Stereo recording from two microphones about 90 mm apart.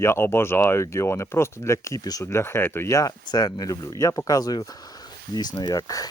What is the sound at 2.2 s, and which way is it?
Speech, 30° left (ahead or behind).